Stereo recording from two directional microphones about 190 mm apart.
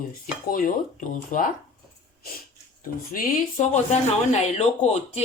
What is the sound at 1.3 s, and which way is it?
Speech, 45° left (ahead or behind).